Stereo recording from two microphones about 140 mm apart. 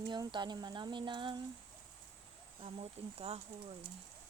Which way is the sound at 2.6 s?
45° right (ahead or behind).